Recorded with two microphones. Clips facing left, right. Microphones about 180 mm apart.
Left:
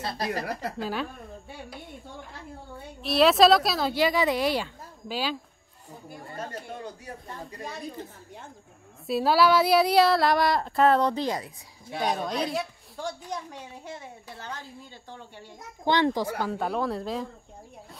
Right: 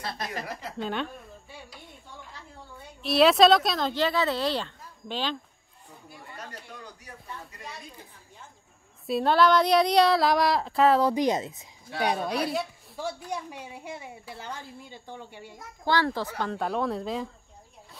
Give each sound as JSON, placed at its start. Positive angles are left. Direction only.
{"t": 0.0, "sound": "a woman's voice", "side_deg": 35}
{"t": 0.7, "sound": "speech", "side_deg": 5}
{"t": 3.0, "sound": "speech", "side_deg": 0}
{"t": 6.0, "sound": "speech", "side_deg": 45}
{"t": 6.7, "sound": "speech", "side_deg": 30}
{"t": 7.2, "sound": "a woman's voice", "side_deg": 40}
{"t": 9.0, "sound": "speech", "side_deg": 5}
{"t": 11.1, "sound": "speech", "side_deg": -20}
{"t": 12.0, "sound": "a woman's voice", "side_deg": -10}
{"t": 15.8, "sound": "speech", "side_deg": 20}